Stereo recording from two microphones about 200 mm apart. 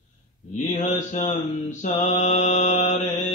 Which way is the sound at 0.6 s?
35° left (ahead or behind).